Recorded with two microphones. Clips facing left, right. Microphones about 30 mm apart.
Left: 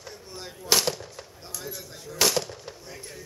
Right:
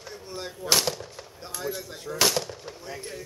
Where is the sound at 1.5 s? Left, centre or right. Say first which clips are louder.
Right 6 dB; right.